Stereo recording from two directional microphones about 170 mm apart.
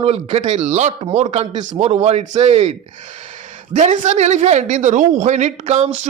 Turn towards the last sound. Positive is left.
turn(degrees=-40)  # may be behind; listen again after turning